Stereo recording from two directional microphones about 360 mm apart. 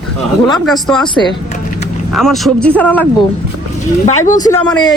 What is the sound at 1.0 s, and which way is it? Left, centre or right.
Speech, centre.